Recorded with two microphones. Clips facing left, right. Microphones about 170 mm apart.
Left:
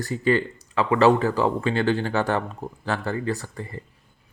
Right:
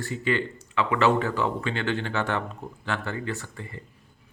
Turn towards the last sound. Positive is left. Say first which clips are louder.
# left 5 dB
turn(degrees=40)  # may be behind; listen again after turning